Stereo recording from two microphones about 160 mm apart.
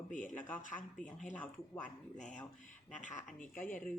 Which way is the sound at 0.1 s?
55° left (ahead or behind).